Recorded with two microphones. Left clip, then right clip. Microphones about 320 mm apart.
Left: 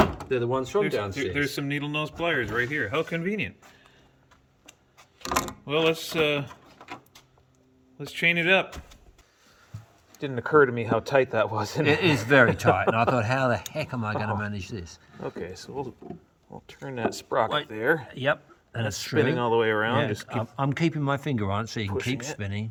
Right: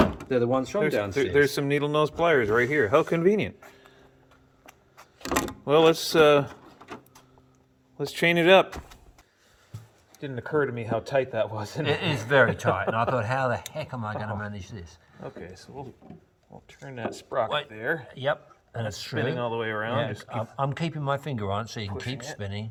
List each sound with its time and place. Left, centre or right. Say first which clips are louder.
0.3 s speech: right 2 dB; centre
4.6 s a sound: right 3 dB; centre
7.9 s speech: right 1 dB; centre
10.2 s speech: left 7 dB; centre
12.1 s speech: right 2 dB; left
14.5 s speech: left 5 dB; centre
16.6 s speech: left 5 dB; centre